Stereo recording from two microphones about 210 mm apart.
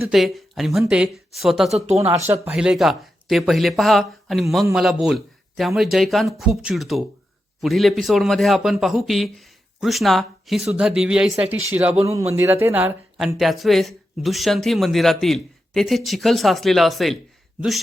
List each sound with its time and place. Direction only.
0.1 s speech: centre (ahead or behind)
1.7 s speech: 30° right (ahead or behind)
2.0 s speech: 10° right (ahead or behind)